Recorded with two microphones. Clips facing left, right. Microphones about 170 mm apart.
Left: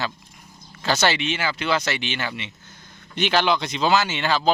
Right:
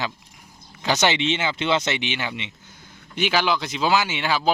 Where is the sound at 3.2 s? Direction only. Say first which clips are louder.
Left 1 dB; 5° right (ahead or behind).